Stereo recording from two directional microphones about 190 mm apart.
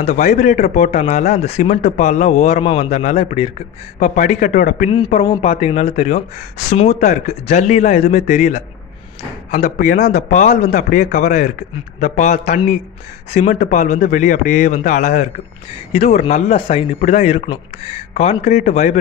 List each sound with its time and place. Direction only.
0.0 s a man's voice: 40° left (ahead or behind)
5.4 s a man's voice: 30° left (ahead or behind); by 10.2 s 55° left (ahead or behind)
10.6 s a man's voice: 40° left (ahead or behind)